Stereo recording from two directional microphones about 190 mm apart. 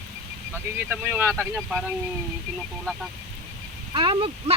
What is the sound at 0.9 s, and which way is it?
Speech, 10° right (ahead or behind).